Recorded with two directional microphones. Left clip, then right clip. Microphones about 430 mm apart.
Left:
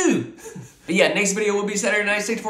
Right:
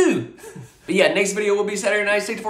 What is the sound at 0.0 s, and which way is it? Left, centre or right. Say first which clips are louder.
Speech: right 2 dB; centre.